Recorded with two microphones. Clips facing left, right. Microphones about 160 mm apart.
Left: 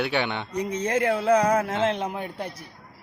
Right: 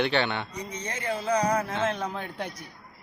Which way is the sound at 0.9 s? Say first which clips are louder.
Left 6 dB; 60° left (ahead or behind).